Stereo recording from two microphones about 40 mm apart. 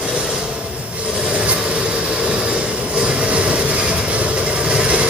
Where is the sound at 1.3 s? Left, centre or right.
Right.